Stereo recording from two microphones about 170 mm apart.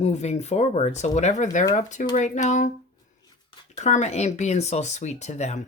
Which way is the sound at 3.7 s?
45° left (ahead or behind).